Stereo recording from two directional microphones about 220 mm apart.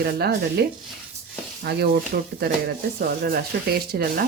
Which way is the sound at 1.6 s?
45° right (ahead or behind).